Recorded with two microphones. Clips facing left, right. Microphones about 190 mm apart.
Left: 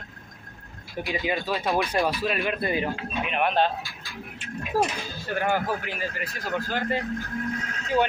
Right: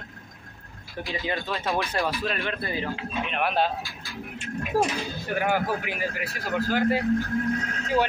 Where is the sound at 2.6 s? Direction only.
15° left (ahead or behind).